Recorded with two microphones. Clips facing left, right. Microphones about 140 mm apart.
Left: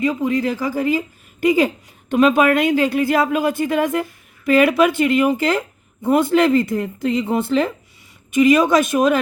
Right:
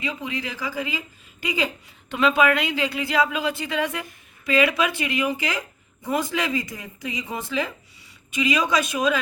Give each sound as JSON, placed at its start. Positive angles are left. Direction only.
{"t": 0.0, "sound": "speech", "side_deg": 45}
{"t": 8.3, "sound": "speech", "side_deg": 50}